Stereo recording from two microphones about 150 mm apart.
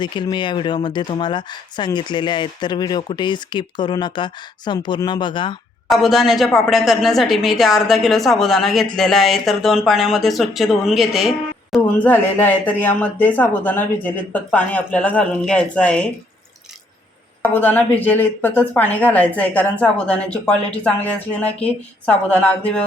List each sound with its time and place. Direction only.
0.0 s speech: 30° left (ahead or behind)
5.9 s a woman's voice: centre (ahead or behind)
11.9 s speech: 10° left (ahead or behind)
17.4 s speech: 10° left (ahead or behind)